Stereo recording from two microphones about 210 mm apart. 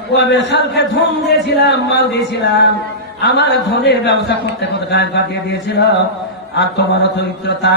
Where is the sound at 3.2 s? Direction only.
55° left (ahead or behind).